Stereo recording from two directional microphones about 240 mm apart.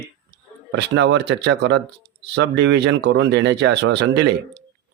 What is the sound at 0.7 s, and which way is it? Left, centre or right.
Speech, right.